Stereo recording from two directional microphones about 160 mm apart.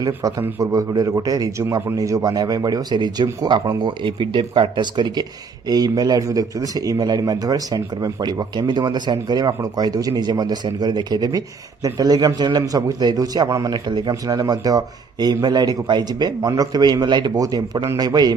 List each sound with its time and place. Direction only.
0.0 s a man's voice: 20° right (ahead or behind)